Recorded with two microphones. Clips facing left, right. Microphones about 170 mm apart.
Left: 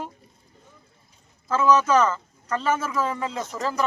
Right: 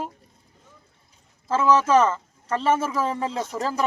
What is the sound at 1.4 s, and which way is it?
A man's voice, 30° right (ahead or behind).